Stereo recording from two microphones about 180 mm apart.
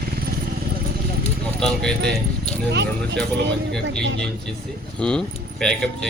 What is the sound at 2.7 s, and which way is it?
Speech, 70° right (ahead or behind).